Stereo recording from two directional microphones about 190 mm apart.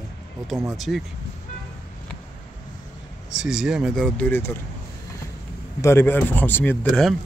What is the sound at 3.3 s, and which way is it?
Speech, 5° right (ahead or behind).